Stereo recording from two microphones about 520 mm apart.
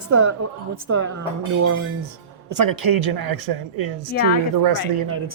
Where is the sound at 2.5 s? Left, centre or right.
Right.